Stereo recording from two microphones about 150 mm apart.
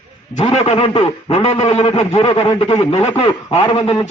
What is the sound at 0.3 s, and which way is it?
A man's voice, 40° left (ahead or behind).